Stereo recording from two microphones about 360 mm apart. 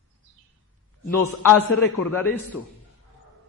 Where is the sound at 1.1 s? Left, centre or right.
Left.